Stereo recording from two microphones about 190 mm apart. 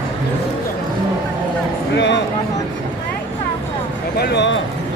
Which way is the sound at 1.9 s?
65° left (ahead or behind).